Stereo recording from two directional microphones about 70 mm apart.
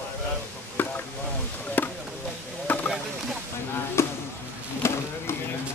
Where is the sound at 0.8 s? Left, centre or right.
Left.